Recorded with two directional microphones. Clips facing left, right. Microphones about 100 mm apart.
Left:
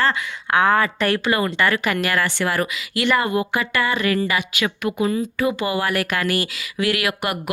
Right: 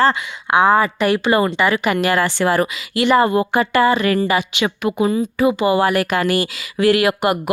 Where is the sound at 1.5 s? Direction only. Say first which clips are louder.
Right 3 dB; 15° right (ahead or behind).